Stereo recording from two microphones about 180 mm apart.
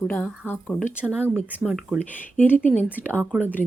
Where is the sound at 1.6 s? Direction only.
Centre (ahead or behind).